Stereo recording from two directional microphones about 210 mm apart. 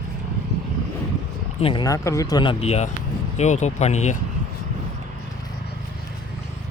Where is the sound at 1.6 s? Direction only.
20° left (ahead or behind).